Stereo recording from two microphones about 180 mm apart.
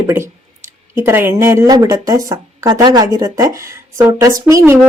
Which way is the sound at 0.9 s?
10° right (ahead or behind).